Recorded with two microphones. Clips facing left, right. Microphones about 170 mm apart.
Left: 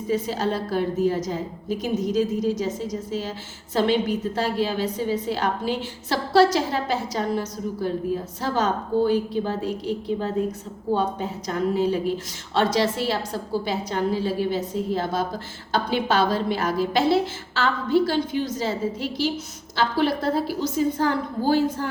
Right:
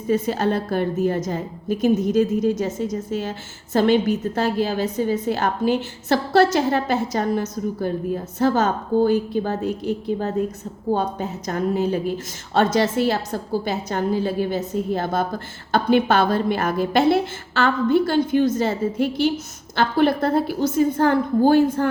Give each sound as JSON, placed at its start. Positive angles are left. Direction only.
{"t": 0.1, "sound": "a woman's voice", "side_deg": -55}